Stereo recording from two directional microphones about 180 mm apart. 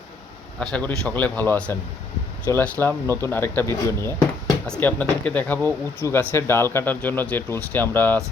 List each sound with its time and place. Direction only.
0.6 s speech: 5° left (ahead or behind)